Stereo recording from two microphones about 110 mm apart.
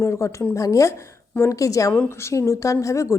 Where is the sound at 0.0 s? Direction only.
25° left (ahead or behind).